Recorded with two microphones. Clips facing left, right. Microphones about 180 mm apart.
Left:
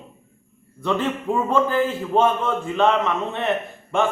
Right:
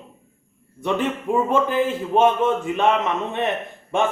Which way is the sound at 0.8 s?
15° right (ahead or behind).